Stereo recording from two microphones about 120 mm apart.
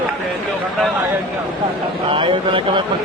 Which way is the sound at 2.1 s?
45° right (ahead or behind).